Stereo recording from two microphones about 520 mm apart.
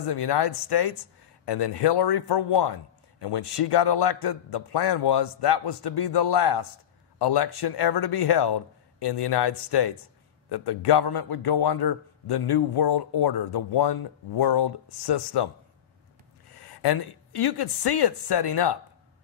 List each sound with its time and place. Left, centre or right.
0.0 s a man's voice: left
16.5 s speech: left